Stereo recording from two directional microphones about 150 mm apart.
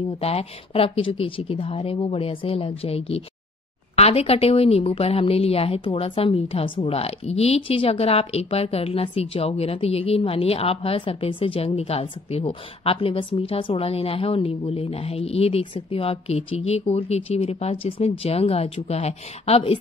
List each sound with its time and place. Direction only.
0.2 s a woman's voice: 40° left (ahead or behind)